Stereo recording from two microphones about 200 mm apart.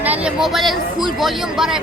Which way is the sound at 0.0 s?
5° right (ahead or behind).